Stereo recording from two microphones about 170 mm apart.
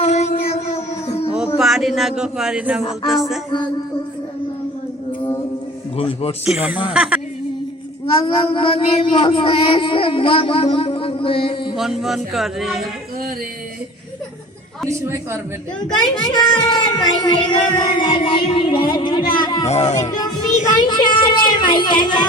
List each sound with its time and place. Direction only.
0.0 s music: 40° left (ahead or behind)
1.5 s speech: centre (ahead or behind)
6.0 s speech: 35° left (ahead or behind)
6.5 s speech: 5° right (ahead or behind)
8.5 s speech: 30° left (ahead or behind)
11.8 s speech: centre (ahead or behind)
14.8 s a sound: 15° right (ahead or behind)
16.2 s speech: 25° left (ahead or behind)
19.6 s speech: 40° left (ahead or behind)
20.1 s speech: 25° left (ahead or behind)